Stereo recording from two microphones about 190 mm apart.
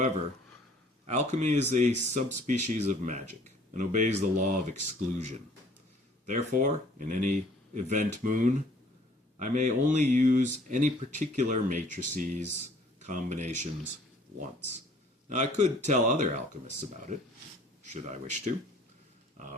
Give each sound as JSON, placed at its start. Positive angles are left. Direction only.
{"t": 1.0, "sound": "speech", "side_deg": -35}
{"t": 15.3, "sound": "speech", "side_deg": -40}